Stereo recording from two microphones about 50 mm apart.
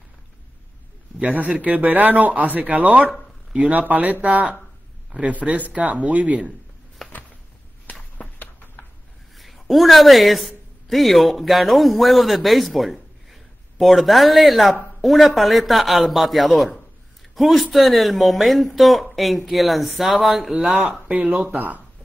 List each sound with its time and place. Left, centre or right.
1.2 s speech: right
3.8 s speech: right
7.0 s a sound: centre
7.8 s a sound: left
9.4 s a woman's voice: centre
20.2 s speech: centre
21.1 s speech: right